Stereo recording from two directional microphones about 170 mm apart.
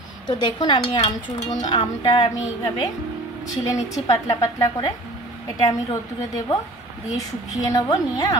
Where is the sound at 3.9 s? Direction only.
20° left (ahead or behind).